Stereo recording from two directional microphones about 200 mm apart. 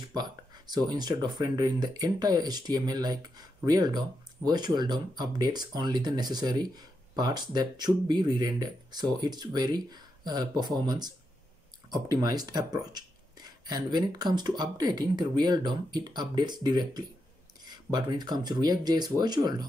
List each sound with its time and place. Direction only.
0.1 s speech: 20° right (ahead or behind)